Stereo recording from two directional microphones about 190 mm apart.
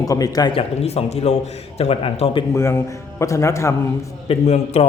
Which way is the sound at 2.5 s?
15° left (ahead or behind).